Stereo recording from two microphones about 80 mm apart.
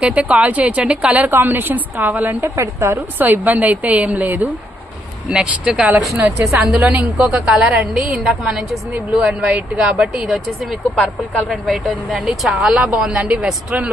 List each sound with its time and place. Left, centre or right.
0.0 s a woman's voice: centre
5.3 s speech: centre